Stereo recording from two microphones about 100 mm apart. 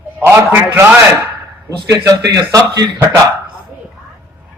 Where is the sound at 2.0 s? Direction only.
40° right (ahead or behind).